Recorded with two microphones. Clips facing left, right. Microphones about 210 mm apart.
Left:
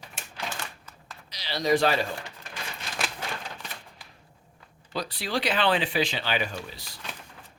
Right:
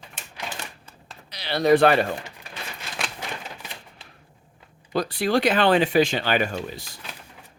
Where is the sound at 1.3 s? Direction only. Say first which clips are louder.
Right 6 dB; 60° right (ahead or behind).